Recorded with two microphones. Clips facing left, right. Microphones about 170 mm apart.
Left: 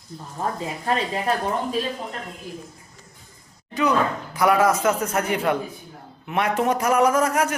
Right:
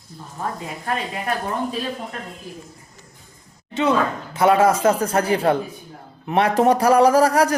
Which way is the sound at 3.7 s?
25° right (ahead or behind).